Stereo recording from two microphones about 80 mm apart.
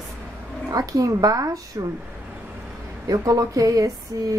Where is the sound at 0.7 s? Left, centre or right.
Right.